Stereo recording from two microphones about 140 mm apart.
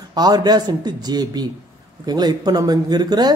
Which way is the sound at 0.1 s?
30° right (ahead or behind).